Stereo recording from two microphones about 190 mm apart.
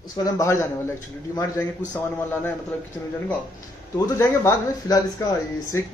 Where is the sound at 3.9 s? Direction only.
15° left (ahead or behind).